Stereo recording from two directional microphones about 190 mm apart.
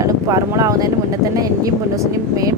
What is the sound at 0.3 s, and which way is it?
Speech, 20° right (ahead or behind).